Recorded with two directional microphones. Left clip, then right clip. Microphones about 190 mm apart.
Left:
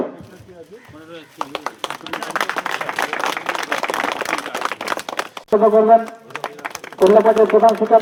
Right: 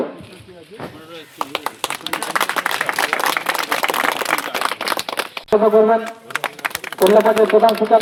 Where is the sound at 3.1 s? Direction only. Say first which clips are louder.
Right 3 dB; 55° right (ahead or behind).